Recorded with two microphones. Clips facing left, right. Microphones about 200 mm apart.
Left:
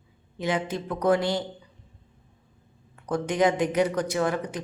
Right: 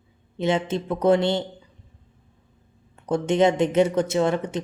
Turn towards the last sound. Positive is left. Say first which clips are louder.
# right 4 dB
turn(degrees=-25)  # may be behind; listen again after turning